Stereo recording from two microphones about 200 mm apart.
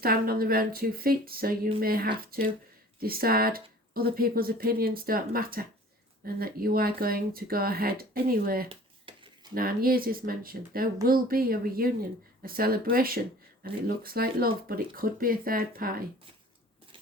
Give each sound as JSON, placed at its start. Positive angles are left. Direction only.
{"t": 0.0, "sound": "speech", "side_deg": -50}
{"t": 8.7, "sound": "a sound", "side_deg": -25}
{"t": 9.6, "sound": "speech", "side_deg": -45}